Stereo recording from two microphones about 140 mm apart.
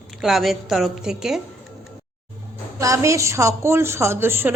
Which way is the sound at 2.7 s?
20° right (ahead or behind).